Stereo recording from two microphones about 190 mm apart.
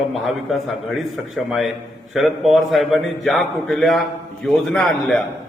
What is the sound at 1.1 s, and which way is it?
A man's voice, centre (ahead or behind).